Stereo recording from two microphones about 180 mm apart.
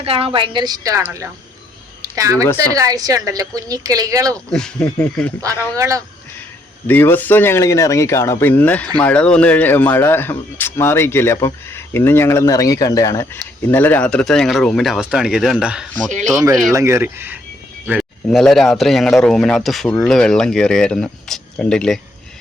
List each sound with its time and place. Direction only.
0.0 s a woman's voice: 30° right (ahead or behind)
2.0 s a sound: 20° right (ahead or behind)
2.7 s a woman's voice: 20° right (ahead or behind)
4.5 s speech: 5° left (ahead or behind)
5.7 s speech: 15° right (ahead or behind)
6.8 s speech: 10° left (ahead or behind)
16.7 s speech: 15° right (ahead or behind); by 22.0 s 5° left (ahead or behind)